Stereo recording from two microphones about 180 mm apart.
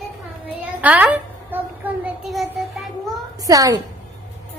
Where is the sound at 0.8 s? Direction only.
10° right (ahead or behind).